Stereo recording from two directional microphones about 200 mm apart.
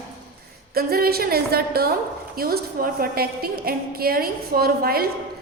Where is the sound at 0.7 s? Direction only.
50° right (ahead or behind).